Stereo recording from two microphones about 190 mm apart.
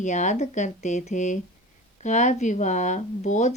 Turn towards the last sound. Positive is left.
turn(degrees=40)  # may be behind; listen again after turning